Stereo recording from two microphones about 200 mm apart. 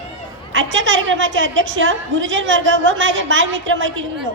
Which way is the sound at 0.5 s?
70° right (ahead or behind).